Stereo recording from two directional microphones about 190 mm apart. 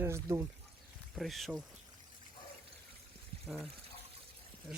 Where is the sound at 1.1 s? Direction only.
Centre (ahead or behind).